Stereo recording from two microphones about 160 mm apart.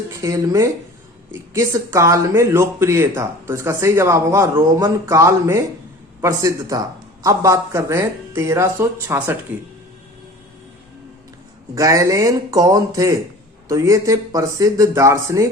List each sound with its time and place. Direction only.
0.1 s speech: 20° right (ahead or behind)
11.7 s speech: 20° right (ahead or behind)